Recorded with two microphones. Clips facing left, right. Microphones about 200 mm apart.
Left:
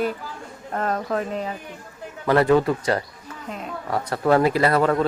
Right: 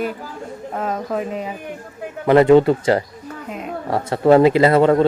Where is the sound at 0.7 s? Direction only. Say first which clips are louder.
Even; 5° right (ahead or behind).